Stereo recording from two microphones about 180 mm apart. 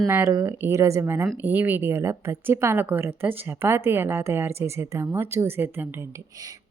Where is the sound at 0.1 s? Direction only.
15° right (ahead or behind).